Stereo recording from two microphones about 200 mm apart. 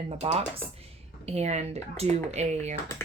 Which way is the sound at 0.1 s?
30° right (ahead or behind).